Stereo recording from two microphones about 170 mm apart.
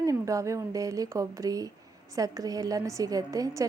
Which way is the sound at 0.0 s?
20° right (ahead or behind).